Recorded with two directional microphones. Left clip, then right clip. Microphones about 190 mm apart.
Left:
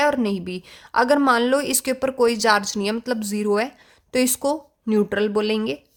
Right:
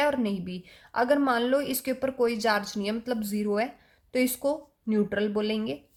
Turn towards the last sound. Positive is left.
turn(degrees=40)  # may be behind; listen again after turning